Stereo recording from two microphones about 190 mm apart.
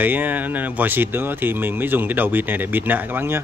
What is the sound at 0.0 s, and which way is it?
Speech, 10° right (ahead or behind).